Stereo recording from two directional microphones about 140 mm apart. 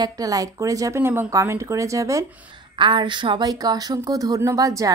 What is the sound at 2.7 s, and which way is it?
Speech, 35° right (ahead or behind).